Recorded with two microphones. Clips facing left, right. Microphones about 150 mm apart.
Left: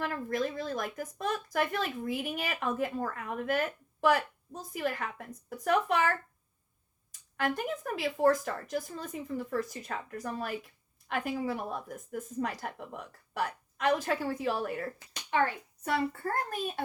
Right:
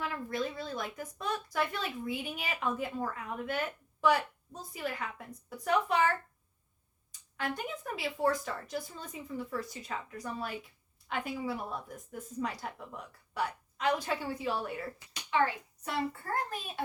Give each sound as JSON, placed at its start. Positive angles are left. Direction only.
{"t": 0.0, "sound": "speech", "side_deg": 45}
{"t": 7.3, "sound": "speech", "side_deg": 45}